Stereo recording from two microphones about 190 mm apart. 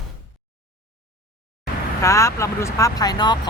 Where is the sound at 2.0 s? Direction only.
15° left (ahead or behind).